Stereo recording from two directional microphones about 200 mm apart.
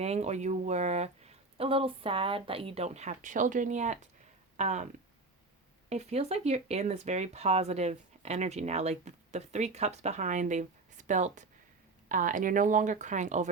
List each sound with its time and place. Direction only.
0.0 s speech: 35° right (ahead or behind)
5.9 s speech: 30° right (ahead or behind)